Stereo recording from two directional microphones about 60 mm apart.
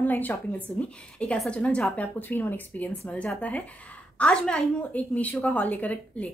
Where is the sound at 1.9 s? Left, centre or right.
Left; by 4.6 s centre.